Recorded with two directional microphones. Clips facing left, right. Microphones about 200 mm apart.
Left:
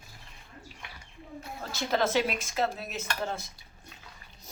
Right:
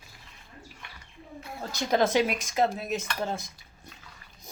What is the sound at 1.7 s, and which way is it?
Cutlery, 15° right (ahead or behind).